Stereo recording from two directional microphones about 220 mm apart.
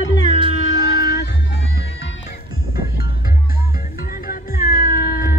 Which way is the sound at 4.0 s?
40° left (ahead or behind).